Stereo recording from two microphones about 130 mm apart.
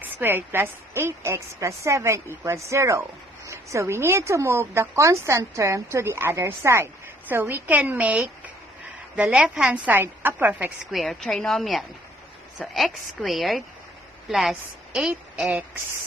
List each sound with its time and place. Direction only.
0.0 s a woman's voice: 15° right (ahead or behind)
10.9 s a woman's voice: centre (ahead or behind)